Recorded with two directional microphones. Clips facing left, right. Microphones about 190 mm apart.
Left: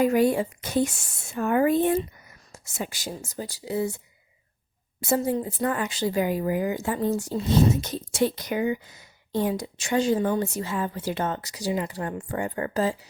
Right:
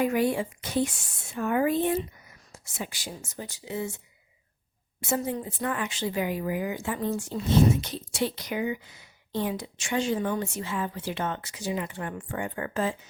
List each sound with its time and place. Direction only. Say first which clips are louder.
0.0 s a woman's voice: left 4 dB; 40° left (ahead or behind)
5.0 s speech: left 5 dB; 35° left (ahead or behind)